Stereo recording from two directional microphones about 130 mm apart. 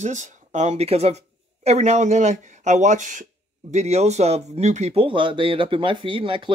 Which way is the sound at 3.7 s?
60° right (ahead or behind).